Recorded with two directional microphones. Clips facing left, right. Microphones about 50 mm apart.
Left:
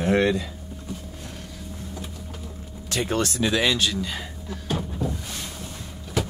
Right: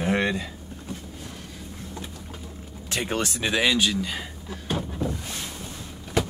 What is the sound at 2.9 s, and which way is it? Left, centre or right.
Speech, centre.